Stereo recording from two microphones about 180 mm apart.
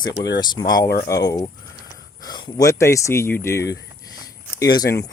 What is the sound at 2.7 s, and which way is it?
Speech, 15° left (ahead or behind).